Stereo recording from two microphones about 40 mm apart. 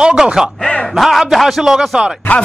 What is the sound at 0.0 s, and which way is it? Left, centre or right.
Speech, centre.